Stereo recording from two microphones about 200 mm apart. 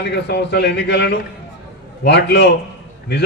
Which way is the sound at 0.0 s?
55° left (ahead or behind).